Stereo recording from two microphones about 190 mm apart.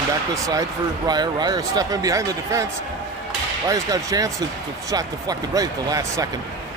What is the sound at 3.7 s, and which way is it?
Speech, 20° right (ahead or behind).